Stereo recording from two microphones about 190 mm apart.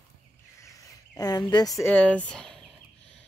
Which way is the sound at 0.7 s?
20° left (ahead or behind).